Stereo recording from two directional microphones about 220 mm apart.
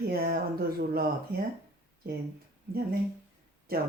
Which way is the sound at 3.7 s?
45° right (ahead or behind).